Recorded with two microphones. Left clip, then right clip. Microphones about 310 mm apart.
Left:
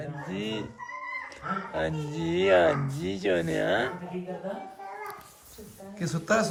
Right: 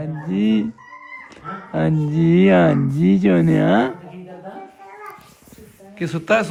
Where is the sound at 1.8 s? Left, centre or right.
Centre.